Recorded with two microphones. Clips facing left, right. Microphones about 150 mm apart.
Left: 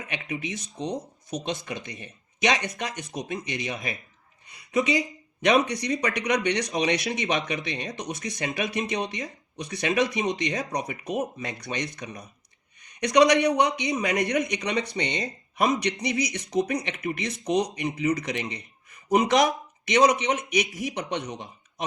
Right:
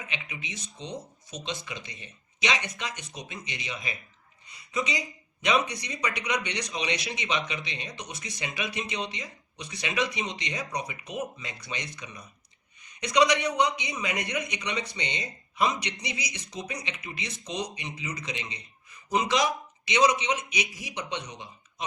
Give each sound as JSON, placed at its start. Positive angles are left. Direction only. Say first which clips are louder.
{"t": 0.1, "sound": "a man's voice", "louder": "left 8 dB", "side_deg": 50}